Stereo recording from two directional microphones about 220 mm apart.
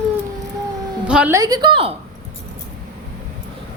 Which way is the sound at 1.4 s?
15° right (ahead or behind).